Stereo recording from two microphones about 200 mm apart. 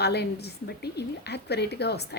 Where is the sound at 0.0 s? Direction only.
55° left (ahead or behind).